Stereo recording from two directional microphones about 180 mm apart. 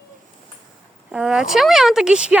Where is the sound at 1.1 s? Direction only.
5° right (ahead or behind).